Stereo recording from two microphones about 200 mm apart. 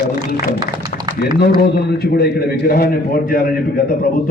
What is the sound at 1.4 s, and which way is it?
A man's voice, 55° left (ahead or behind).